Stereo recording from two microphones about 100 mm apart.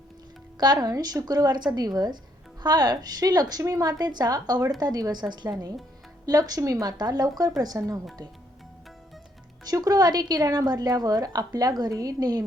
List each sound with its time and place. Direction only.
0.6 s a woman's voice: 40° right (ahead or behind)
9.6 s a woman's voice: 40° right (ahead or behind)